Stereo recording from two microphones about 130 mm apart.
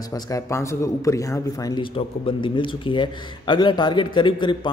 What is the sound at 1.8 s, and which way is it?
A man's voice, 40° left (ahead or behind).